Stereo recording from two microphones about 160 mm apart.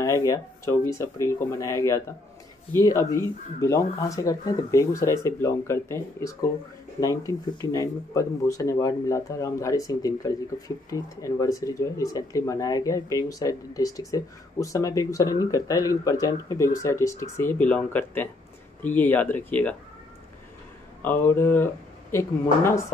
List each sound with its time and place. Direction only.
0.0 s speech: 20° left (ahead or behind)
21.0 s speech: 10° left (ahead or behind)